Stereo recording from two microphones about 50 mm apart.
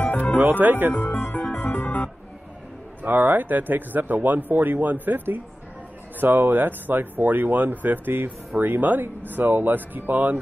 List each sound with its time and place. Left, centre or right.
0.0 s music: left
0.4 s speech: right
0.9 s music: left
3.0 s speech: right